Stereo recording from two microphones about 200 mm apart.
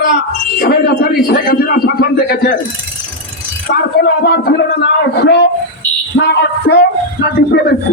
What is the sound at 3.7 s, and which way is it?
Speech, 55° left (ahead or behind).